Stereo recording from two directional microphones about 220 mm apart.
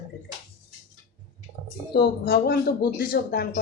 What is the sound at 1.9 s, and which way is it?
A woman's voice, 45° left (ahead or behind).